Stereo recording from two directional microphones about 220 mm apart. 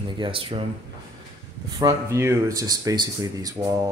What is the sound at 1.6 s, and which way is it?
Speech, 15° right (ahead or behind).